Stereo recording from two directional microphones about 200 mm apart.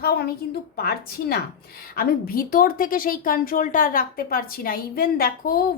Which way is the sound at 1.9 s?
45° left (ahead or behind).